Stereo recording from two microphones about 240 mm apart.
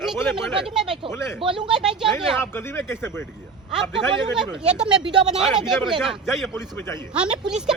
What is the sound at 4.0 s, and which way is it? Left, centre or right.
Speech, centre.